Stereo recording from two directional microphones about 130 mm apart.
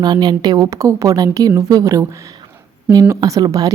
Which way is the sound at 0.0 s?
30° right (ahead or behind).